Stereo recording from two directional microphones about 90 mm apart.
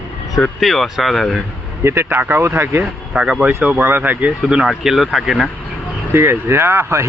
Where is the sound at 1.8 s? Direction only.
30° right (ahead or behind).